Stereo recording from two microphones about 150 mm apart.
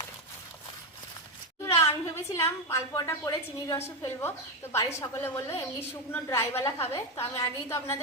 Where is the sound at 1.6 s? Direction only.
15° left (ahead or behind).